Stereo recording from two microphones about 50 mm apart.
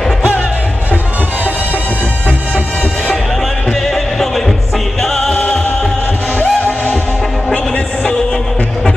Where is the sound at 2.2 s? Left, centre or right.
Left.